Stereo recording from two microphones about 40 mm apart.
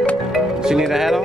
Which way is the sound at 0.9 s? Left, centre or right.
Centre.